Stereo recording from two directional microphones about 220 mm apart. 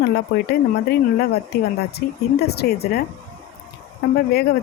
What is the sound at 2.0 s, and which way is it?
Speech, 45° left (ahead or behind).